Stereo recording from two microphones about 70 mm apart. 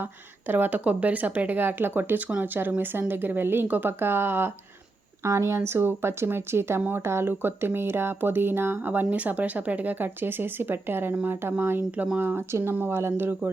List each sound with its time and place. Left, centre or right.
0.0 s a woman's voice: right
5.2 s a woman's voice: right